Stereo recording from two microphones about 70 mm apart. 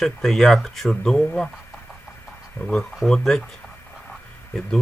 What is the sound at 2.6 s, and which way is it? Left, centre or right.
Speech, left.